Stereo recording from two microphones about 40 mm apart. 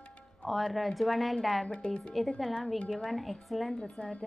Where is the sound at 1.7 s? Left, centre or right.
Left.